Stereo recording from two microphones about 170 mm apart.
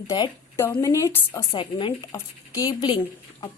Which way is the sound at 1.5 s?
30° left (ahead or behind).